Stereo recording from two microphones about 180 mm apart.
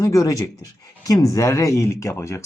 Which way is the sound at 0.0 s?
20° left (ahead or behind).